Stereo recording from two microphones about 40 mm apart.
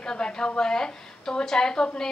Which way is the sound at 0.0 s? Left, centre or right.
Centre.